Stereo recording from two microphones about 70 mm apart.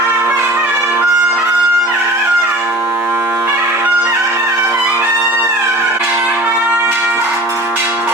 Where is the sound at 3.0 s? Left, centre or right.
Right.